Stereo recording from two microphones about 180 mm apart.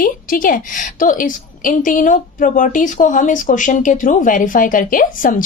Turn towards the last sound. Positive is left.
turn(degrees=50)  # may be behind; listen again after turning